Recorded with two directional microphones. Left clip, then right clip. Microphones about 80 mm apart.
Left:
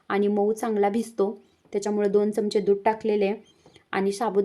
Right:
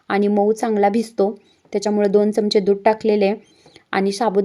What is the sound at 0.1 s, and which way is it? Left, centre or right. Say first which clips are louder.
A woman's voice: right 6 dB; right.